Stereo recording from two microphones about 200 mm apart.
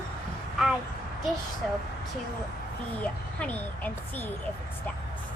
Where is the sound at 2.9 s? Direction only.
5° left (ahead or behind).